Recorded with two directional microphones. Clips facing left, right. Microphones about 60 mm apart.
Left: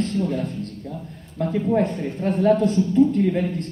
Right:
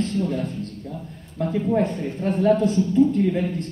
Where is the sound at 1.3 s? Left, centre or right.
Left.